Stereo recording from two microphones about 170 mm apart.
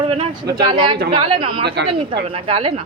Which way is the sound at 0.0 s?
35° right (ahead or behind).